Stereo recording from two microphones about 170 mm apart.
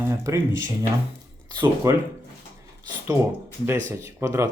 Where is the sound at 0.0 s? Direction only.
15° right (ahead or behind).